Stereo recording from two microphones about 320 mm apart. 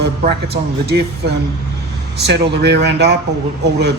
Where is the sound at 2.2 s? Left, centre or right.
Right.